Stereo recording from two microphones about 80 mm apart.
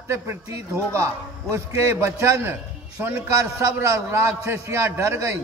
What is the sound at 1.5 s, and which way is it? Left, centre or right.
Music, right.